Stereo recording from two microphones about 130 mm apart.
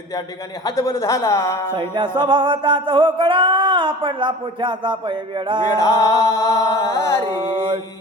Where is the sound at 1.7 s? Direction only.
40° right (ahead or behind).